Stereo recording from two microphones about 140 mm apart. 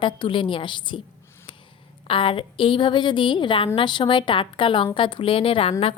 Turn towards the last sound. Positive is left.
turn(degrees=45)  # may be behind; listen again after turning